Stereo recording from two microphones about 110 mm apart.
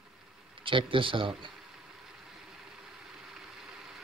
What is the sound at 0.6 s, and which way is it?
Speech, 50° right (ahead or behind).